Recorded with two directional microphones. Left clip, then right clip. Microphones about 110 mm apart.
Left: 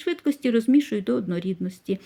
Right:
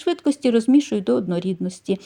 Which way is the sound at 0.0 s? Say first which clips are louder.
Right 5 dB; 25° right (ahead or behind).